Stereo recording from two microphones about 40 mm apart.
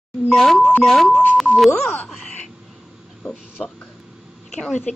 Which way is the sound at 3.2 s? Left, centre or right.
Left.